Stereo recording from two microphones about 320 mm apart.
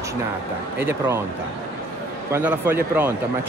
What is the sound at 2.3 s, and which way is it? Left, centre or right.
Speech, centre.